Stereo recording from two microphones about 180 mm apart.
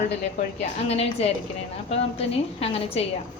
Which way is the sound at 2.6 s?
35° left (ahead or behind).